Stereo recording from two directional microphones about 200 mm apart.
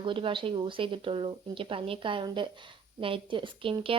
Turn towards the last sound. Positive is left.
turn(degrees=-25)  # may be behind; listen again after turning